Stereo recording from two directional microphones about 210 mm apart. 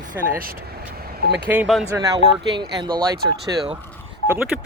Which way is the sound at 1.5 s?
5° right (ahead or behind).